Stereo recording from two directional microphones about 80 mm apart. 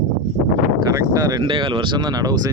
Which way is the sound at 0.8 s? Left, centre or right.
Right.